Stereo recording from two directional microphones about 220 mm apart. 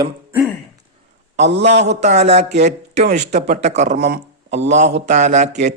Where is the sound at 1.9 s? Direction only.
30° right (ahead or behind).